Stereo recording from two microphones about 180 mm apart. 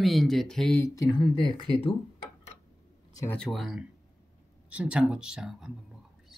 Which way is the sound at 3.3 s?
Centre (ahead or behind).